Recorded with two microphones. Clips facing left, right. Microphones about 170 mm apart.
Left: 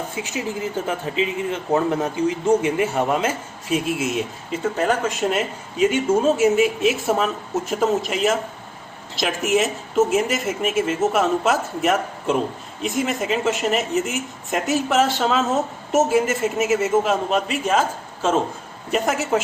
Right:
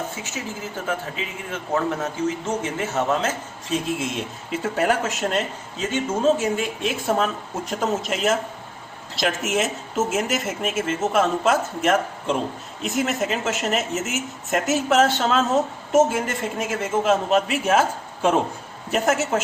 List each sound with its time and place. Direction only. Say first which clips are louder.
0.2 s a man's voice: left 6 dB; 15° left (ahead or behind)
4.6 s speech: left 1 dB; 5° right (ahead or behind)
18.9 s speech: even; centre (ahead or behind)